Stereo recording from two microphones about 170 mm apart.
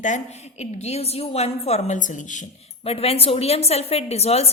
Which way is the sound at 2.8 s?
35° left (ahead or behind).